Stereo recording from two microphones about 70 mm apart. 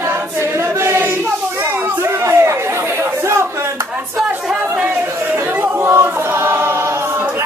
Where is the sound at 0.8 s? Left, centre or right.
Right.